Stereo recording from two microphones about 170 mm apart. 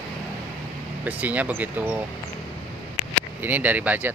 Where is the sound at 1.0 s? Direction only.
10° right (ahead or behind).